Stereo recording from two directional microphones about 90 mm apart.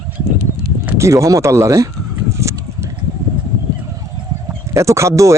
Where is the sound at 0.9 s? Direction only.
35° right (ahead or behind).